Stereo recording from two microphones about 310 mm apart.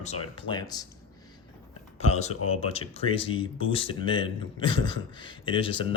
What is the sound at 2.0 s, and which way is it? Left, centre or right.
Speech, left.